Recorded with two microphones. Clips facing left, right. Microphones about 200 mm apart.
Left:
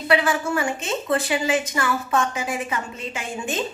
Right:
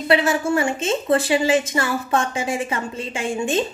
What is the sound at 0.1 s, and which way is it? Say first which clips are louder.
Speech: right 3 dB; 25° right (ahead or behind).